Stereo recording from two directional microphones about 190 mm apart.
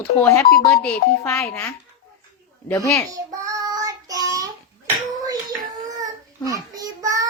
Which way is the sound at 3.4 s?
20° right (ahead or behind).